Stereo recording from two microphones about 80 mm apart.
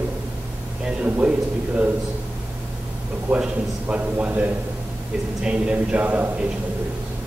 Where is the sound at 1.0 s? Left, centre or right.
Centre.